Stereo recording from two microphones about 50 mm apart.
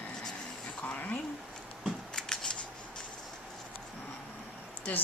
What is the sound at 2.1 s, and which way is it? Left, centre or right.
Scissors, centre.